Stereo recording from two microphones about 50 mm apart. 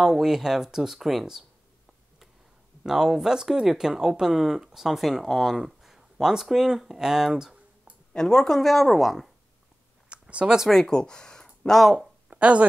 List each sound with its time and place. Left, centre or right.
0.0 s speech: centre
2.8 s speech: centre
8.1 s speech: centre
10.0 s a sound: right
10.7 s speech: centre
12.3 s a sound: right